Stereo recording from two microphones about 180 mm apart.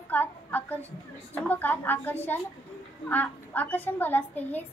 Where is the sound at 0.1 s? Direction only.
10° left (ahead or behind).